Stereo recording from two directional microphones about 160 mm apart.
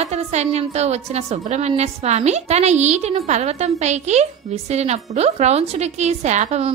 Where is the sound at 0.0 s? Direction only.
45° right (ahead or behind).